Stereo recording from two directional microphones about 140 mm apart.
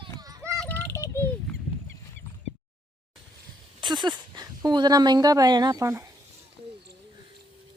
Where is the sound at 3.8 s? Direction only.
30° right (ahead or behind).